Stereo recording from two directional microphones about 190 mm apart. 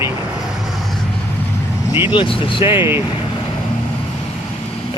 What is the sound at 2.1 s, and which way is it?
Speech, 25° left (ahead or behind).